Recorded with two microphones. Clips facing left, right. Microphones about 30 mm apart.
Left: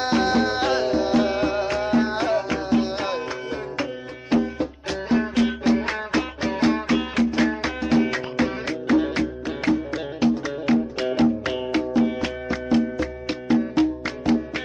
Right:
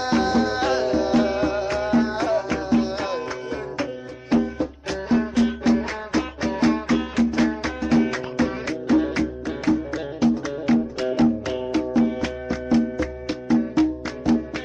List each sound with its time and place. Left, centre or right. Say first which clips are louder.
0.0 s music: even; left
0.6 s music: even; centre